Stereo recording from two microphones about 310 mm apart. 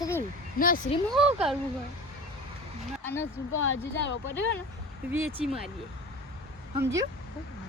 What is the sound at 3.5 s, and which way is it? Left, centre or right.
Speech, left.